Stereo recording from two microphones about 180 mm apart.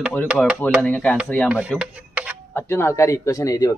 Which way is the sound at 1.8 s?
10° right (ahead or behind).